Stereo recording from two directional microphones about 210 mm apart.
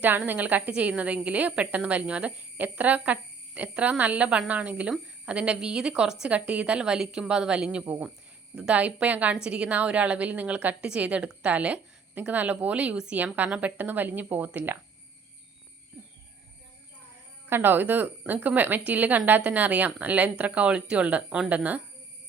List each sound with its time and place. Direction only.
0.0 s a woman's voice: 10° right (ahead or behind)
15.9 s a sound: 5° right (ahead or behind)
17.5 s a woman's voice: 10° right (ahead or behind)